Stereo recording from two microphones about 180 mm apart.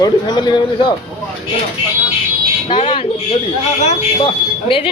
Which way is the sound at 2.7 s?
25° left (ahead or behind).